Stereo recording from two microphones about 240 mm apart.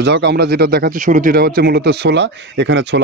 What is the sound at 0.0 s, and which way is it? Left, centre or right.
Speech, right.